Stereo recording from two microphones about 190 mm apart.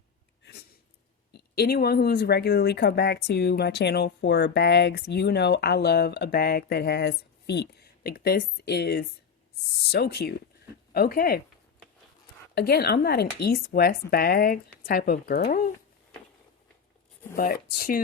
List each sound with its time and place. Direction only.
0.4 s a sound: 55° left (ahead or behind)
1.3 s speech: 55° left (ahead or behind)
12.5 s speech: 55° left (ahead or behind)
17.3 s speech: 50° left (ahead or behind)